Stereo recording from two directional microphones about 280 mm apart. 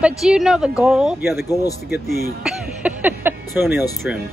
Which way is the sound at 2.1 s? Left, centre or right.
Right.